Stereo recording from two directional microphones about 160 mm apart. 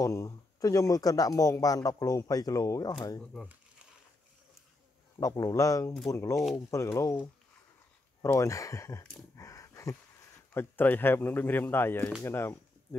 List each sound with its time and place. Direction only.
0.0 s a man's voice: 20° left (ahead or behind)
5.2 s a man's voice: 20° left (ahead or behind)
9.3 s dog: 20° left (ahead or behind)
10.5 s speech: 15° left (ahead or behind)